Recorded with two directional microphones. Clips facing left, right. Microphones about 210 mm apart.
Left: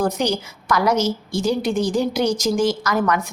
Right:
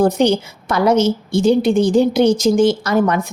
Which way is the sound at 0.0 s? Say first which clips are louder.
Right 7 dB; 30° right (ahead or behind).